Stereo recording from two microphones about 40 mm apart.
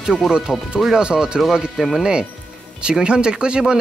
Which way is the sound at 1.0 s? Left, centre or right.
Right.